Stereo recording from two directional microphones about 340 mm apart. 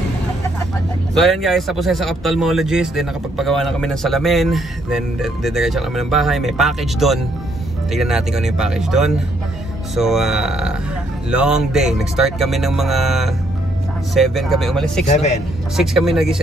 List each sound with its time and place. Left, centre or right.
1.1 s speech: centre